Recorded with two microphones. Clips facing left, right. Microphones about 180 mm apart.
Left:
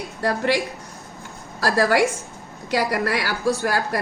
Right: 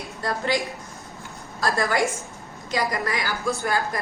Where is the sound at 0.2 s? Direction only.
65° left (ahead or behind).